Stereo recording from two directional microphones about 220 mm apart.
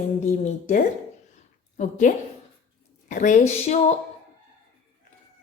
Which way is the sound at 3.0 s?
35° left (ahead or behind).